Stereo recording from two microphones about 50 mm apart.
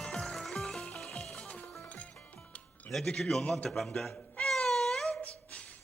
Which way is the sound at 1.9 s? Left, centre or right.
Left.